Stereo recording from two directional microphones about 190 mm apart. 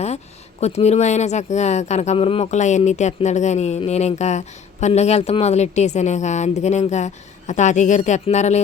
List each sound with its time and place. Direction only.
0.6 s speech: 35° left (ahead or behind)